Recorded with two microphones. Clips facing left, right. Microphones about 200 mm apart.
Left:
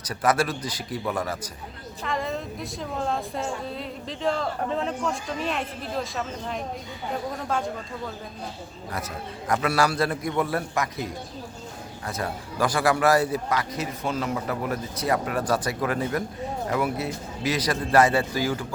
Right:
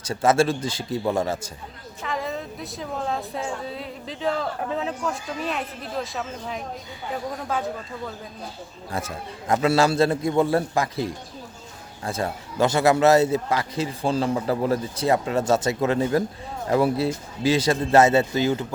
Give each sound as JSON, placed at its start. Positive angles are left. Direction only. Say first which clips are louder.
{"t": 0.0, "sound": "a man's voice", "louder": "right 4 dB", "side_deg": -25}
{"t": 2.0, "sound": "a woman's voice", "louder": "even", "side_deg": 0}
{"t": 8.9, "sound": "a man's voice", "louder": "right 3 dB", "side_deg": -25}